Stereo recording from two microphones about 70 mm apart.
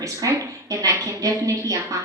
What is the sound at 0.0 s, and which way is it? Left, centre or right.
A woman's voice, right.